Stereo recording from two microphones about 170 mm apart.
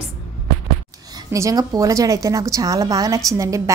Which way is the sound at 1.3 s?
20° right (ahead or behind).